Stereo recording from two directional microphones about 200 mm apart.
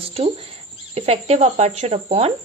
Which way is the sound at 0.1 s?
30° right (ahead or behind).